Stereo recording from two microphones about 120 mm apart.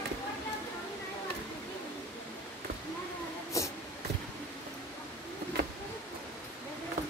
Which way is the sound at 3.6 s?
25° left (ahead or behind).